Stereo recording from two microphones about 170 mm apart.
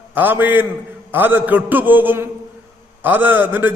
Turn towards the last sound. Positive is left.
turn(degrees=-10)  # may be behind; listen again after turning